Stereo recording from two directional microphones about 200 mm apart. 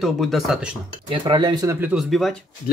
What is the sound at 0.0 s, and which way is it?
Speech, centre (ahead or behind).